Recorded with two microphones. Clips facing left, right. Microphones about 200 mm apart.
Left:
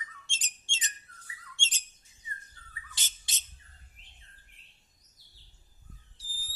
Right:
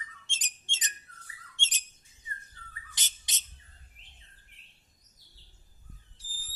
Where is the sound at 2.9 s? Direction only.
20° right (ahead or behind).